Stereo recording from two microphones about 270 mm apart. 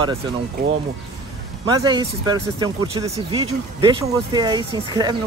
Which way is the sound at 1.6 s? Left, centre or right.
Centre.